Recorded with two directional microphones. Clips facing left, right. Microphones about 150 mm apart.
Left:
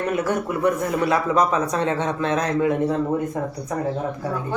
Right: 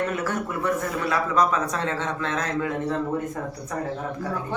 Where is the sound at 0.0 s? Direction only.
15° left (ahead or behind).